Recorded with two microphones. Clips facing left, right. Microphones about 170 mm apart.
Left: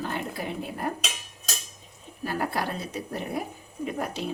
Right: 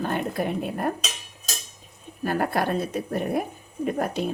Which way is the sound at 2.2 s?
55° right (ahead or behind).